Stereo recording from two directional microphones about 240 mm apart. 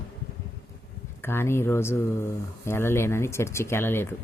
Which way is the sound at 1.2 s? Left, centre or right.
Centre.